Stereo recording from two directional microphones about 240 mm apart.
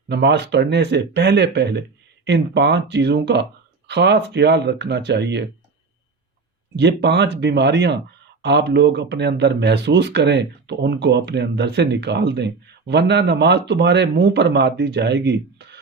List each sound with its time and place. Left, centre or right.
0.1 s speech: right
6.7 s speech: right